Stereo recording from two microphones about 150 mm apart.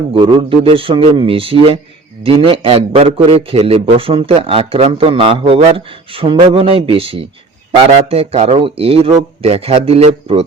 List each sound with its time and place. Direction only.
0.1 s a man's voice: 35° right (ahead or behind)